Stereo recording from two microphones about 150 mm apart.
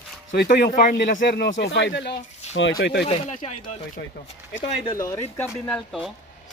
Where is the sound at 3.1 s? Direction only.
45° left (ahead or behind).